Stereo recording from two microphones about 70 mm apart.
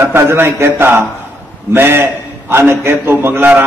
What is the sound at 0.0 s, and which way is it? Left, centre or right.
A man's voice, right.